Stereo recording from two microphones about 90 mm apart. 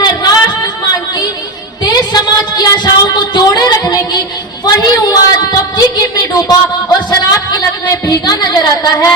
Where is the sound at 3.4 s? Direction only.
45° left (ahead or behind).